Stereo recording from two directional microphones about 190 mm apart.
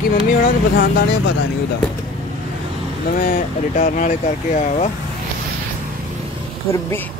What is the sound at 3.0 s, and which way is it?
Speech, 40° left (ahead or behind).